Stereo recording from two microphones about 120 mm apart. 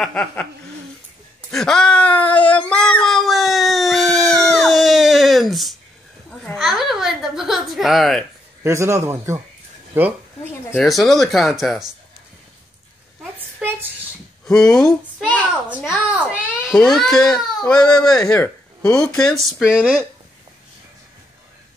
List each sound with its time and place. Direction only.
0.0 s speech: 5° left (ahead or behind)
1.5 s a sound: 5° left (ahead or behind)
4.6 s baby cry: centre (ahead or behind)
6.4 s a sound: centre (ahead or behind)
8.6 s a man's voice: 25° right (ahead or behind)
10.7 s speech: centre (ahead or behind)
14.4 s speech: 5° left (ahead or behind)
16.2 s babbling: 10° right (ahead or behind)
16.7 s speech: 5° left (ahead or behind)
19.6 s speech: 10° right (ahead or behind)